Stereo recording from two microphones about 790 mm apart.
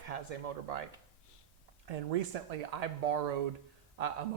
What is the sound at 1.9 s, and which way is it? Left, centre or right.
Speech, right.